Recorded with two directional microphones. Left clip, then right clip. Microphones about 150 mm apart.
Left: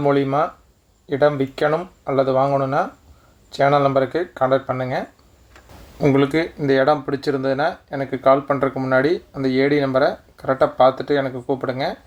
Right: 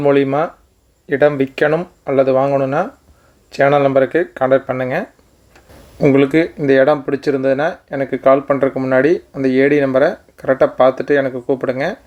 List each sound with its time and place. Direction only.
0.0 s speech: 25° right (ahead or behind)